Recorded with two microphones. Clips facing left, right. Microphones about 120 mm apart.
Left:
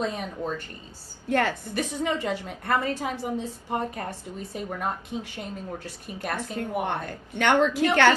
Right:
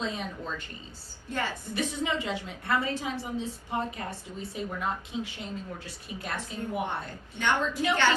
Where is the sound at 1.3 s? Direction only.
65° left (ahead or behind); by 4.6 s 50° left (ahead or behind).